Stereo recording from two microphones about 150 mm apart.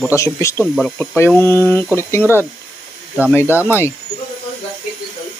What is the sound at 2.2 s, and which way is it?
Speech, 15° right (ahead or behind).